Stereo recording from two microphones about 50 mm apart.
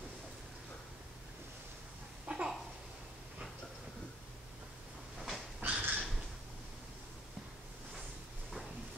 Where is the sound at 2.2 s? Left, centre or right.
Centre.